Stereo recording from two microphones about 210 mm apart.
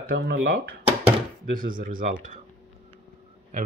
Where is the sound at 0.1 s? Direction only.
50° right (ahead or behind).